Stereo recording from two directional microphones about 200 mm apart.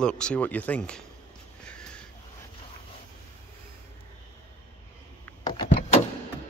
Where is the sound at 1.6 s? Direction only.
5° left (ahead or behind).